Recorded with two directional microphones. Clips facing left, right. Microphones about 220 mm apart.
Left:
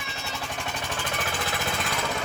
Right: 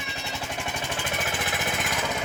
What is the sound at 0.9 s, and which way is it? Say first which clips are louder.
Jackhammer: even; 20° right (ahead or behind).